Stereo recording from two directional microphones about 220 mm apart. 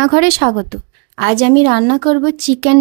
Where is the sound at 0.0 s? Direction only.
50° right (ahead or behind).